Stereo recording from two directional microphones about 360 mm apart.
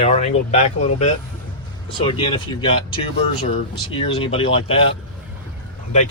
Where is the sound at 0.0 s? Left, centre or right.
Centre.